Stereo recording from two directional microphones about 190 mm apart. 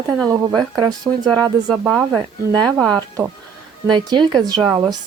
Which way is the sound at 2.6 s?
5° left (ahead or behind).